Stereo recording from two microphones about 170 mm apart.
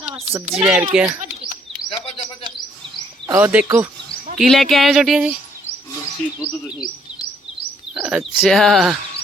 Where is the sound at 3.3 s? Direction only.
10° right (ahead or behind).